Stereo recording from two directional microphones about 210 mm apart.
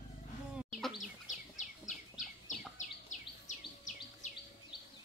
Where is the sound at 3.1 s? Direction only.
35° left (ahead or behind).